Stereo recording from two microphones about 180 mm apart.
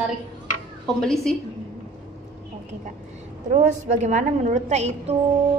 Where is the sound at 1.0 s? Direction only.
5° left (ahead or behind).